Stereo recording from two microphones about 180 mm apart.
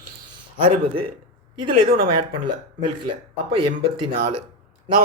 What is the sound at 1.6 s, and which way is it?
Speech, 30° right (ahead or behind).